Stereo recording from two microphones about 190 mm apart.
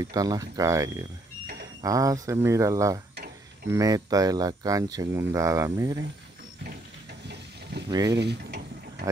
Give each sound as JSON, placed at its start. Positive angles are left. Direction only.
{"t": 0.0, "sound": "speech", "side_deg": -20}
{"t": 6.6, "sound": "a sound", "side_deg": -60}
{"t": 7.9, "sound": "mechanisms", "side_deg": -20}
{"t": 8.2, "sound": "tick-tock", "side_deg": -60}